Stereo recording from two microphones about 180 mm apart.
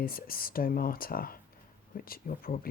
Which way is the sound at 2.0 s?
55° left (ahead or behind).